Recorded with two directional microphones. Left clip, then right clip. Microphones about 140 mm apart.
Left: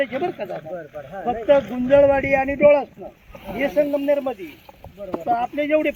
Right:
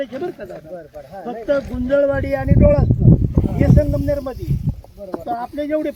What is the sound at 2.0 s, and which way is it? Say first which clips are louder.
Speech: left 3 dB; 40° right (ahead or behind).